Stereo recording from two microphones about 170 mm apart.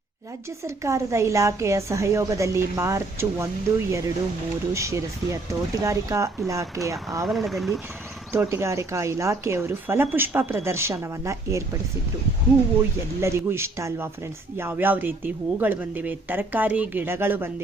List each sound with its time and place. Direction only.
0.6 s a woman's voice: 15° right (ahead or behind)
7.3 s speech: centre (ahead or behind)
8.3 s a woman's voice: 15° right (ahead or behind)
13.2 s a woman's voice: 15° right (ahead or behind)